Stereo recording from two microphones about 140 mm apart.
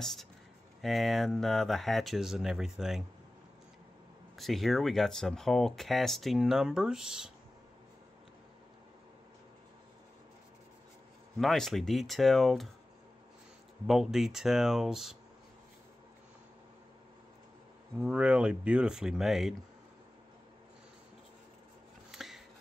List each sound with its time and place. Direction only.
0.0 s speech: centre (ahead or behind)
4.4 s speech: centre (ahead or behind)
11.3 s speech: centre (ahead or behind)
13.8 s speech: centre (ahead or behind)
17.9 s speech: 5° right (ahead or behind)
22.1 s a sound: centre (ahead or behind)